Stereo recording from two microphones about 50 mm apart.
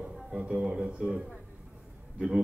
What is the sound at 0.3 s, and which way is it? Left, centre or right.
Speech, right.